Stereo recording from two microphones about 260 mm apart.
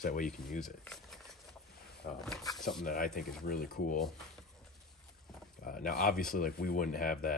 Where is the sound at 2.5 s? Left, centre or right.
Centre.